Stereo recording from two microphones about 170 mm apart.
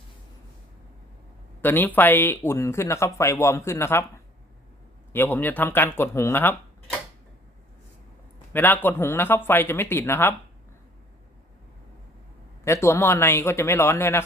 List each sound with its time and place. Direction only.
1.6 s speech: 10° left (ahead or behind)
5.1 s speech: 10° left (ahead or behind)
8.5 s speech: 10° left (ahead or behind)
12.6 s speech: 15° left (ahead or behind)